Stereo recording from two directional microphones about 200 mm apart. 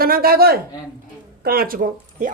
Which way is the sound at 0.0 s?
50° right (ahead or behind).